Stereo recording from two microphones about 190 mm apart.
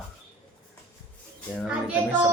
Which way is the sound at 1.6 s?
5° right (ahead or behind).